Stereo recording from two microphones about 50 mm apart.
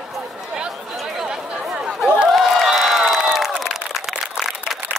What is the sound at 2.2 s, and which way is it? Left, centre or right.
Crowd, centre.